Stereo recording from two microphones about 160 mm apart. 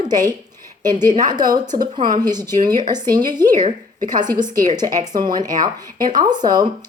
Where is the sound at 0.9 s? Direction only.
25° right (ahead or behind).